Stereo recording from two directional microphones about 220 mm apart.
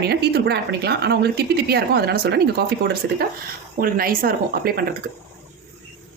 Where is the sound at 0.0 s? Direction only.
45° right (ahead or behind).